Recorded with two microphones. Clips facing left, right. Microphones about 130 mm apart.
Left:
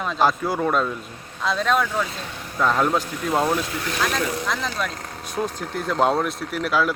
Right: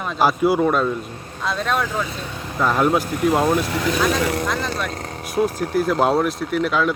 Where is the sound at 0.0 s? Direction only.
10° right (ahead or behind).